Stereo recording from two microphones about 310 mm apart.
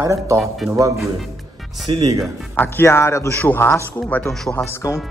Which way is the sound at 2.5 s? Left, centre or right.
Centre.